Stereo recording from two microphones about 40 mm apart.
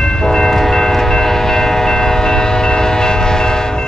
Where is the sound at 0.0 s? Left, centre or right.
Centre.